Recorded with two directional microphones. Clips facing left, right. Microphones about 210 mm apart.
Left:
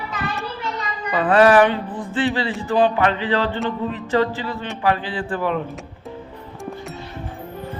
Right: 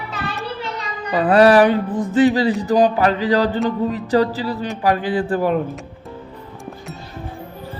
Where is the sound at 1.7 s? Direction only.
45° right (ahead or behind).